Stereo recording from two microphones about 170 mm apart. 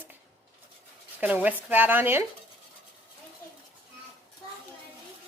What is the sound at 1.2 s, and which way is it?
A woman's voice, 10° right (ahead or behind).